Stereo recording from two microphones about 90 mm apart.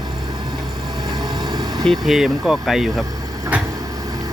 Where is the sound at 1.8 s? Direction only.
Centre (ahead or behind).